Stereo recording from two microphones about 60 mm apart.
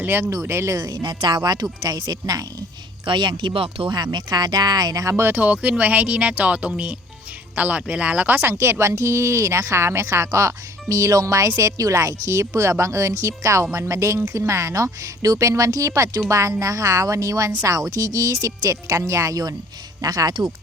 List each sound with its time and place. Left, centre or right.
0.0 s speech: right
0.7 s speech: right
4.4 s speech: right
5.3 s speech: right
8.4 s speech: right